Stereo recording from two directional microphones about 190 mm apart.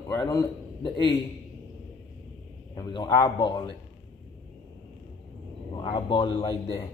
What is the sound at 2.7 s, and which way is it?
Speech, 20° left (ahead or behind).